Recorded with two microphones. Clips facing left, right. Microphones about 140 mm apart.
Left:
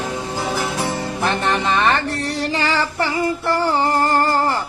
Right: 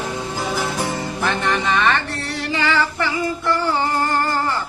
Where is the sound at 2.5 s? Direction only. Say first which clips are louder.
Right 3 dB; 35° left (ahead or behind).